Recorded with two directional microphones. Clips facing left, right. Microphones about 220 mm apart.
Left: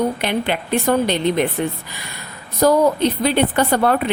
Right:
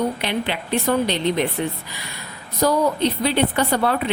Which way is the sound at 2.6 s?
50° left (ahead or behind).